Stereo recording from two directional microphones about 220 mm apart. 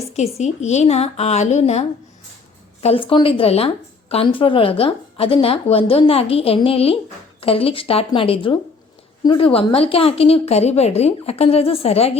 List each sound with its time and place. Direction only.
0.1 s a woman's voice: 30° left (ahead or behind)
2.8 s a woman's voice: 25° left (ahead or behind)